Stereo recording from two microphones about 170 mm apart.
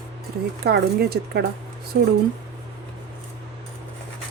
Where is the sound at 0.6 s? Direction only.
70° right (ahead or behind).